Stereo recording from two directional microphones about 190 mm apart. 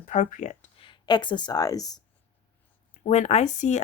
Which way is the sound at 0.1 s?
40° left (ahead or behind).